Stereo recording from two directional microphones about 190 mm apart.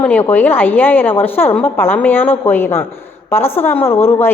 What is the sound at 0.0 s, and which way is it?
A woman's voice, 10° left (ahead or behind).